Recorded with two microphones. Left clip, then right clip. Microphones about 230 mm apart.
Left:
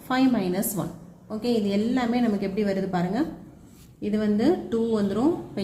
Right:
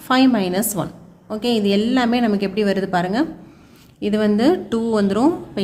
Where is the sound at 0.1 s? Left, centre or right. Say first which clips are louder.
Right 7 dB; right.